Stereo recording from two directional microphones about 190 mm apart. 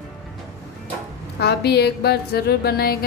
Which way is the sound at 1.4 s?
60° left (ahead or behind).